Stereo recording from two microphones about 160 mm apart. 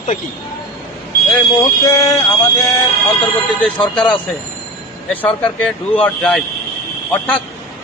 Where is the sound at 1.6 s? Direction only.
20° left (ahead or behind).